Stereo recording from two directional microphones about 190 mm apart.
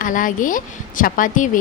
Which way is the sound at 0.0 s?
45° left (ahead or behind).